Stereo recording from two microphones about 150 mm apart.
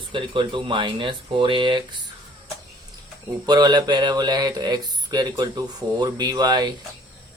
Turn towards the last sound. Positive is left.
turn(degrees=-25)  # may be behind; listen again after turning